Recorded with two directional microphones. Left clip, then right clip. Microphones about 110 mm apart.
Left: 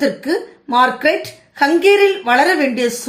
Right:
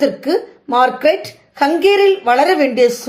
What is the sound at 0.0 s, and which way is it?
A woman's voice, 35° right (ahead or behind).